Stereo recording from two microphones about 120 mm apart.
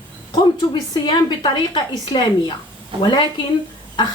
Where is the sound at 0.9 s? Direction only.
40° left (ahead or behind).